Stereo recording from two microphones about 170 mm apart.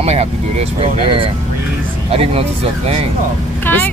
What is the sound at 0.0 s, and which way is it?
Speech, 35° right (ahead or behind).